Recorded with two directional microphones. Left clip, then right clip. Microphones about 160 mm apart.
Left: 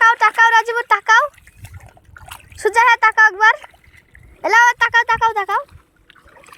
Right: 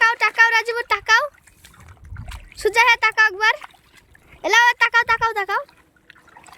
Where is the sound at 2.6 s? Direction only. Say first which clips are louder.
Left 3 dB; 25° right (ahead or behind).